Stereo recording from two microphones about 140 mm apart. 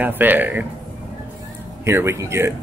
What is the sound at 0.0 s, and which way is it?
Speech, 15° right (ahead or behind).